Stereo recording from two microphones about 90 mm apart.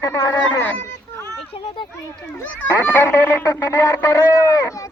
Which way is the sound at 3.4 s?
45° left (ahead or behind).